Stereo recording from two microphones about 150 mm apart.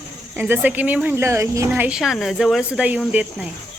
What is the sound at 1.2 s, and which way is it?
Speech, 20° right (ahead or behind).